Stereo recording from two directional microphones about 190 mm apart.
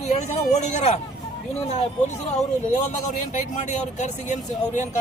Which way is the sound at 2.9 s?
40° left (ahead or behind).